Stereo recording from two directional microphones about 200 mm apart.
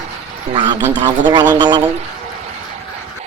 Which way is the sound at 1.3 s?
20° right (ahead or behind).